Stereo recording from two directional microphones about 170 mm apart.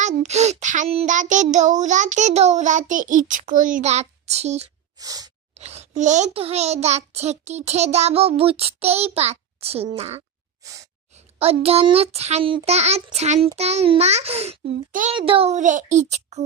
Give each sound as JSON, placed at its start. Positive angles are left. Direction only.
{"t": 0.0, "sound": "child singing", "side_deg": -40}
{"t": 4.9, "sound": "a sound", "side_deg": -20}
{"t": 5.5, "sound": "a child's voice", "side_deg": -40}
{"t": 10.6, "sound": "gasp", "side_deg": -20}
{"t": 11.3, "sound": "a child's voice", "side_deg": -35}